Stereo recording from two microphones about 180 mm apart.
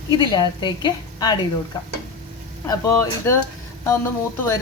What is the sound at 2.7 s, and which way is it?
Speech, 20° left (ahead or behind).